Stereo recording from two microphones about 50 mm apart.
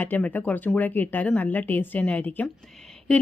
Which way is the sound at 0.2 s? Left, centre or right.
Left.